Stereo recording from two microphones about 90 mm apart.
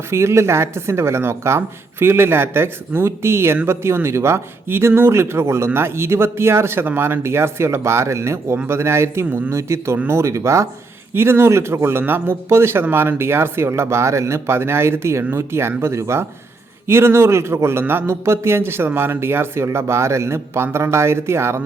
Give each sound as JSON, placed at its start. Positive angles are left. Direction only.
{"t": 0.1, "sound": "speech", "side_deg": -30}